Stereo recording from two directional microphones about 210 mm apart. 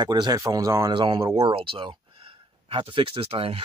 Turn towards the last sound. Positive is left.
turn(degrees=-25)  # may be behind; listen again after turning